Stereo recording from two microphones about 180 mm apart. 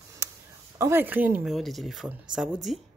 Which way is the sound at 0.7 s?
15° right (ahead or behind).